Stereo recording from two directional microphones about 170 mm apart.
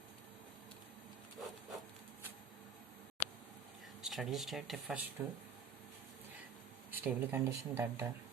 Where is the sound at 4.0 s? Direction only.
Centre (ahead or behind).